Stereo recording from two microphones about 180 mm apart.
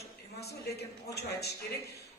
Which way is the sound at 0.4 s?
65° left (ahead or behind).